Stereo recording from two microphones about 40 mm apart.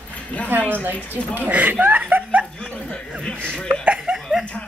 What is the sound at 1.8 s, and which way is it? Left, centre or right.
Laughter, right.